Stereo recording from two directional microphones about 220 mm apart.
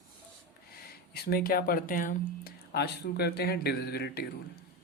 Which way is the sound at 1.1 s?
45° left (ahead or behind).